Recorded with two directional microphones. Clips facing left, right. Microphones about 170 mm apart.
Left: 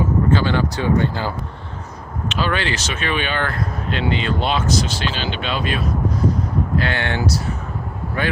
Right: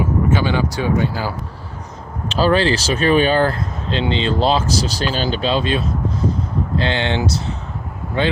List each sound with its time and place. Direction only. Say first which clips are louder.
0.0 s speech: even; 15° right (ahead or behind)
2.3 s speech: right 7 dB; 35° right (ahead or behind)